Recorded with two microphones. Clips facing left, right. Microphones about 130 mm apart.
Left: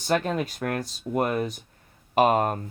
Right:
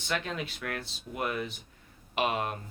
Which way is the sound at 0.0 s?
45° left (ahead or behind).